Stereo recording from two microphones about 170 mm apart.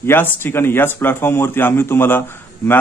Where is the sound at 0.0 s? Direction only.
15° left (ahead or behind).